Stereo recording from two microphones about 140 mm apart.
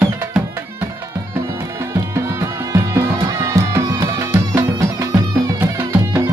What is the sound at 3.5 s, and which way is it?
Music, 25° right (ahead or behind).